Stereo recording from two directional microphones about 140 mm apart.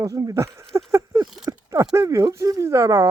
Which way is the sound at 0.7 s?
20° right (ahead or behind).